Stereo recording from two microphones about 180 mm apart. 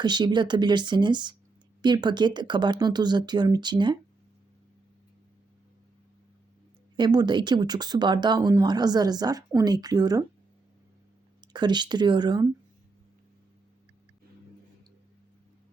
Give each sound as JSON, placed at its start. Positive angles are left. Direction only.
{"t": 0.0, "sound": "speech", "side_deg": -25}
{"t": 6.9, "sound": "speech", "side_deg": -25}
{"t": 11.3, "sound": "speech", "side_deg": -25}